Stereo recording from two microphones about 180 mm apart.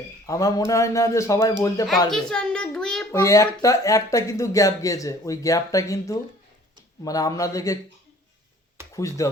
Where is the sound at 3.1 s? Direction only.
15° left (ahead or behind).